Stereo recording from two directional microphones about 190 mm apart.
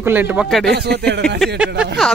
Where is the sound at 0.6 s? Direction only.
60° right (ahead or behind).